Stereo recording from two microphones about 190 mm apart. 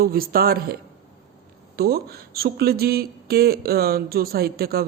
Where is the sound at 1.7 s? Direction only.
55° right (ahead or behind).